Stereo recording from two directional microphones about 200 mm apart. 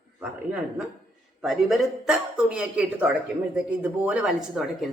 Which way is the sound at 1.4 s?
Centre (ahead or behind).